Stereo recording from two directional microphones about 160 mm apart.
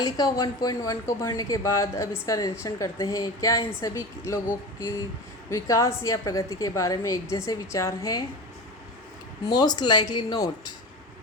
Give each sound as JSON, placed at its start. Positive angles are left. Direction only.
{"t": 0.0, "sound": "speech", "side_deg": 20}
{"t": 5.5, "sound": "speech", "side_deg": 20}
{"t": 9.5, "sound": "speech", "side_deg": 25}